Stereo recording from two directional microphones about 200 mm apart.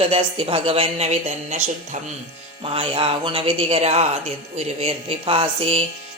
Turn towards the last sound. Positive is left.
turn(degrees=-30)  # may be behind; listen again after turning